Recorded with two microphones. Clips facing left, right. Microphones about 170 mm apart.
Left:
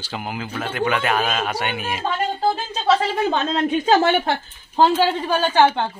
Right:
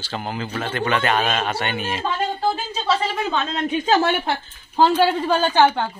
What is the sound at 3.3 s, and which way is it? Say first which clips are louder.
A woman's voice: left 3 dB; 35° left (ahead or behind).